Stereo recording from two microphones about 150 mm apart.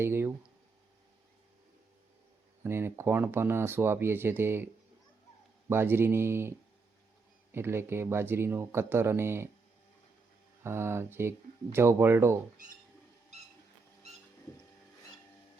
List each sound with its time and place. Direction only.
0.0 s speech: 15° right (ahead or behind)
2.6 s speech: 15° right (ahead or behind)
7.5 s speech: 15° right (ahead or behind)
10.6 s speech: 15° right (ahead or behind)